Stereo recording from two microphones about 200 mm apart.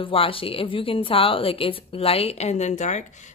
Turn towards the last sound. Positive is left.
turn(degrees=35)  # may be behind; listen again after turning